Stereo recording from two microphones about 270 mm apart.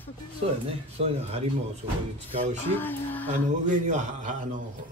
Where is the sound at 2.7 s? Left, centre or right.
Centre.